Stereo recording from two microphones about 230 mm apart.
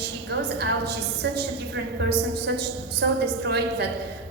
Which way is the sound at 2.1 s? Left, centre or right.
Right.